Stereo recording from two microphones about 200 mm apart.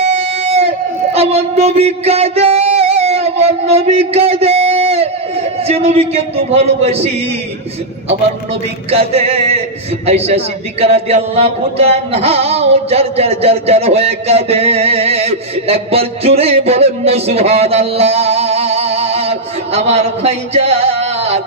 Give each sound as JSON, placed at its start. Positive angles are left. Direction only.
{"t": 0.0, "sound": "a sound", "side_deg": -30}
{"t": 1.1, "sound": "music", "side_deg": -30}
{"t": 5.6, "sound": "a man's voice", "side_deg": -30}
{"t": 8.9, "sound": "a man's voice", "side_deg": -30}